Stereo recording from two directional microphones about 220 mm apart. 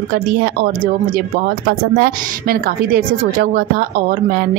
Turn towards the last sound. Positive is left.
turn(degrees=-45)  # may be behind; listen again after turning